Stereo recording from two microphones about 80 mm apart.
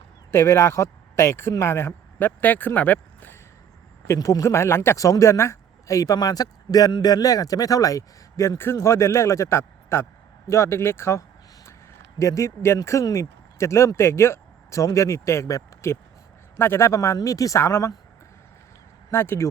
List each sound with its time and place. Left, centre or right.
0.3 s speech: left
4.0 s speech: left
4.9 s speech: left
12.2 s speech: left
19.1 s speech: left